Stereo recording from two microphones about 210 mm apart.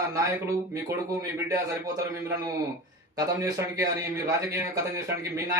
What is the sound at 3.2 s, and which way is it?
Speech, 15° right (ahead or behind).